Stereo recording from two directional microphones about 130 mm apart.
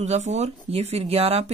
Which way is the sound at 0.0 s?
60° right (ahead or behind).